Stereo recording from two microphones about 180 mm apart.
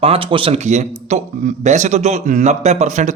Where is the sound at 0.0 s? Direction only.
30° right (ahead or behind).